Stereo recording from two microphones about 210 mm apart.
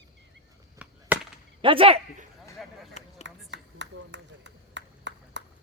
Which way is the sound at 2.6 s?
Centre (ahead or behind).